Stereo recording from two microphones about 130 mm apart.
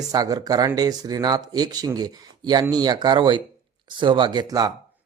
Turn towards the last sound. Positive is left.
turn(degrees=-30)  # may be behind; listen again after turning